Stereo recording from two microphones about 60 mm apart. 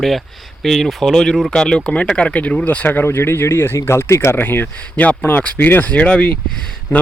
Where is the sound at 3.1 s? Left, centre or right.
Left.